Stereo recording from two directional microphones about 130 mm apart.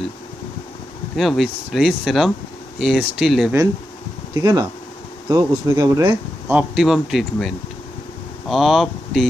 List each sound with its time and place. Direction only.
1.1 s speech: centre (ahead or behind)
4.3 s speech: 30° right (ahead or behind)
6.5 s speech: 5° right (ahead or behind)